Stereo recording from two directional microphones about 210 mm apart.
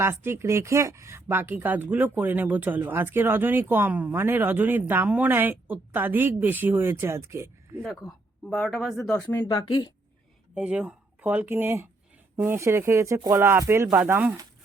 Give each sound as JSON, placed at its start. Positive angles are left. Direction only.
{"t": 0.0, "sound": "speech", "side_deg": -10}
{"t": 8.4, "sound": "speech", "side_deg": 10}
{"t": 9.3, "sound": "speech", "side_deg": 15}
{"t": 10.5, "sound": "speech", "side_deg": -5}